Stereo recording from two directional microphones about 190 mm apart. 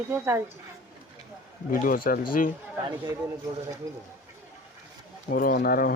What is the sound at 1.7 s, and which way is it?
Speech, 50° left (ahead or behind).